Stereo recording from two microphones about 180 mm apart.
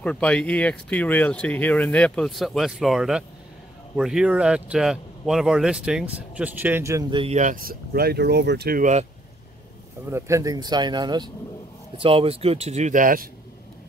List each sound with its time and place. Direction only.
0.0 s speech: 5° left (ahead or behind); by 7.3 s 25° right (ahead or behind)
7.3 s speech: 50° right (ahead or behind)
10.0 s speech: 15° right (ahead or behind); by 13.3 s 50° right (ahead or behind)